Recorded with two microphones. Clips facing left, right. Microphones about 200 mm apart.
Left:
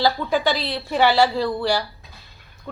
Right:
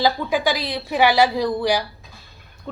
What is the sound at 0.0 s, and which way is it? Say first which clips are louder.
A woman's voice: even; 10° right (ahead or behind).